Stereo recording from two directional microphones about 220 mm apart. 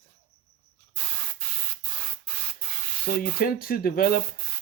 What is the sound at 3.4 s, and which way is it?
Speech, 40° left (ahead or behind).